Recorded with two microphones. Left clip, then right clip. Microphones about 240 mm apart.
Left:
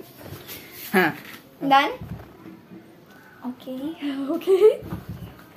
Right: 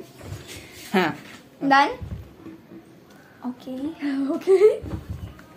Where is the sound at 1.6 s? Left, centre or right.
Centre.